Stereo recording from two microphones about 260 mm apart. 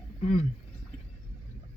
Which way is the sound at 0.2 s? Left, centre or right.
Left.